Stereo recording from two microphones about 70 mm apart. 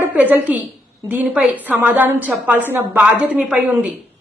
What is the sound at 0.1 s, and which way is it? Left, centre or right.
A woman's voice, right.